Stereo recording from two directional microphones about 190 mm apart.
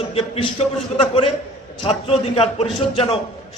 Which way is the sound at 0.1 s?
30° left (ahead or behind).